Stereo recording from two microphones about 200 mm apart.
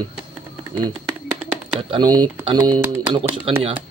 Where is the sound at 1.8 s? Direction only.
25° right (ahead or behind).